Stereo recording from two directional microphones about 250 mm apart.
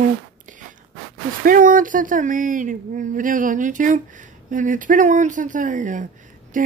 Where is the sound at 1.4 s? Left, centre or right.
Right.